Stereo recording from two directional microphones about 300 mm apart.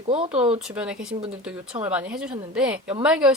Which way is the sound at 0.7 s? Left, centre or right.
Centre.